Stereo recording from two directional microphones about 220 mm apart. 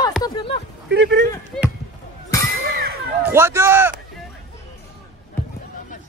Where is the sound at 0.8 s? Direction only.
50° right (ahead or behind).